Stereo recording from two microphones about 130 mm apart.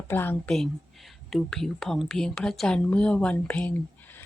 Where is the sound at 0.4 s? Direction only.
5° left (ahead or behind).